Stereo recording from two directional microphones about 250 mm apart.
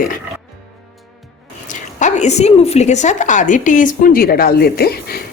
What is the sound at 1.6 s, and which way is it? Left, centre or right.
Speech, left.